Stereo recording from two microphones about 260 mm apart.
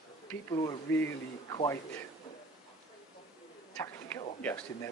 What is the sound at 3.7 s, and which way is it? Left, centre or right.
Speech, centre.